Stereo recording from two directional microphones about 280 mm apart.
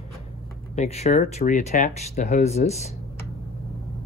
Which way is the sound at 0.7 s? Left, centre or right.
Left.